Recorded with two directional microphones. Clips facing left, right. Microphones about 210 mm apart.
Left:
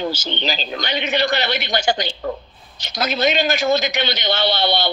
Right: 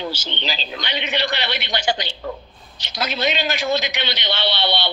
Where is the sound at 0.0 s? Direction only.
45° left (ahead or behind).